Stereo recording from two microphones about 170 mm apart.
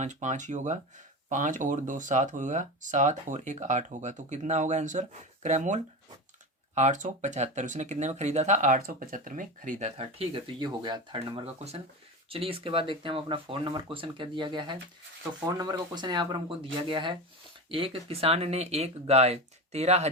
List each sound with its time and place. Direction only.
0.0 s speech: 45° right (ahead or behind)